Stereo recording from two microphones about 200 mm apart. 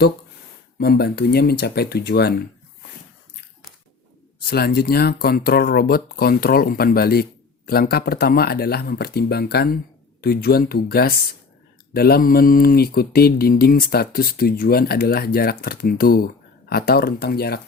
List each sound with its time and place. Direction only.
0.8 s speech: 50° left (ahead or behind)
4.4 s speech: 50° left (ahead or behind)